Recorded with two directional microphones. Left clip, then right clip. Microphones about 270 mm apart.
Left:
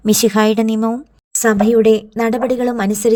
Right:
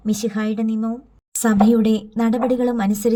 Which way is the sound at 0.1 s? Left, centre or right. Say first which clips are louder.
Left 11 dB; left.